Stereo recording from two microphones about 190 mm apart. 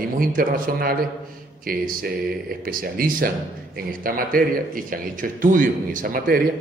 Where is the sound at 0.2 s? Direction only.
50° right (ahead or behind).